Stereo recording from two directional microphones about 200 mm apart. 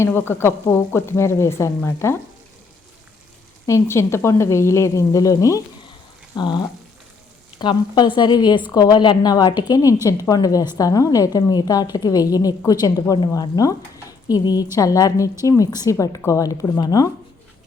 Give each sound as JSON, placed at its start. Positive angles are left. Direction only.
{"t": 0.0, "sound": "a woman's voice", "side_deg": 10}
{"t": 3.7, "sound": "a woman's voice", "side_deg": 15}